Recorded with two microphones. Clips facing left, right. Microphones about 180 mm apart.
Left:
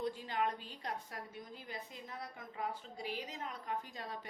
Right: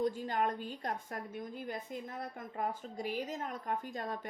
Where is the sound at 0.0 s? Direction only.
45° right (ahead or behind).